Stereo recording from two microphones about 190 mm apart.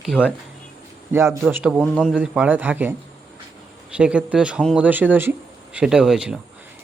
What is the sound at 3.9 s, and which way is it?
Speech, 5° right (ahead or behind).